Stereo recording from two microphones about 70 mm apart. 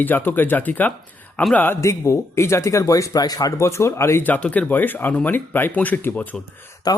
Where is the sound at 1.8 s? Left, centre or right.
Left.